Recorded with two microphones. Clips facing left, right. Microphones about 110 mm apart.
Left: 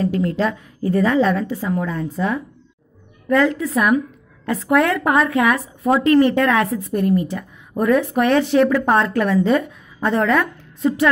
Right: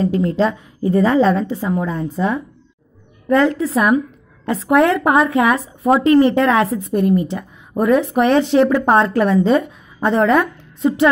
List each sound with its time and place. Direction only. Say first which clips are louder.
0.0 s a woman's voice: right 3 dB; 25° right (ahead or behind)